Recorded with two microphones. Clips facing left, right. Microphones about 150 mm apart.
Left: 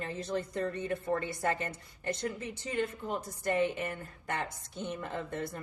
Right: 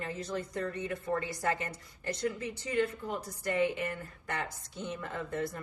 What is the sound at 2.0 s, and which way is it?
Speech, 25° left (ahead or behind).